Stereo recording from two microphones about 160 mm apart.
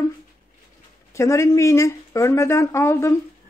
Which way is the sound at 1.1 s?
20° left (ahead or behind).